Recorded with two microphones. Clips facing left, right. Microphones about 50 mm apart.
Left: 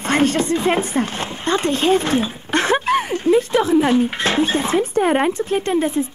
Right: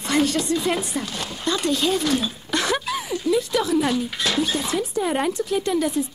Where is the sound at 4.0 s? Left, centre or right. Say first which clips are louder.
Left 6 dB; left.